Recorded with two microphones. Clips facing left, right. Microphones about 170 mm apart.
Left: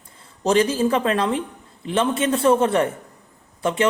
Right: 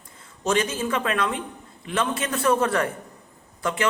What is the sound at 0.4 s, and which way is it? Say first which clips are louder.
A man's voice: left 6 dB; 30° left (ahead or behind).